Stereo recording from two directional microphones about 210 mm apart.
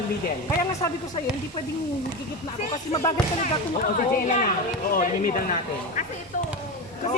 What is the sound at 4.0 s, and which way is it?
A woman's voice, 35° left (ahead or behind).